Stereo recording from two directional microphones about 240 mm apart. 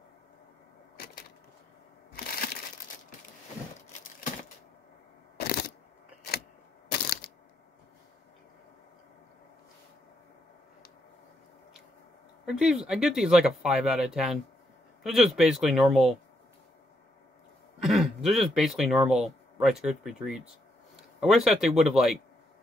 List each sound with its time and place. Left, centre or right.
0.9 s a sound: left
2.1 s crushing: left
6.9 s crushing: left
12.4 s speech: centre
17.8 s speech: centre